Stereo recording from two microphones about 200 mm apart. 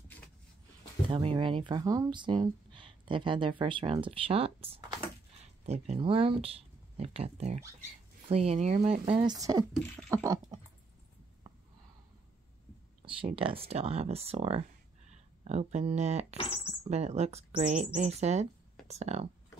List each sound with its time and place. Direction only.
1.1 s speech: 25° right (ahead or behind)
13.0 s speech: 25° right (ahead or behind)